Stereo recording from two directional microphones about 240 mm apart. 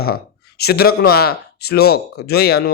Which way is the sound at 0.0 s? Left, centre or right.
Left.